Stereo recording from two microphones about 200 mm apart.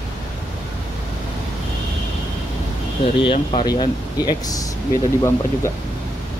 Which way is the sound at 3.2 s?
25° left (ahead or behind).